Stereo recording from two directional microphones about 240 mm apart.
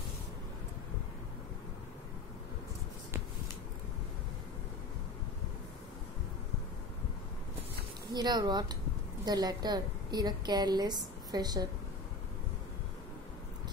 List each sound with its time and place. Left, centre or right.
8.1 s a woman's voice: centre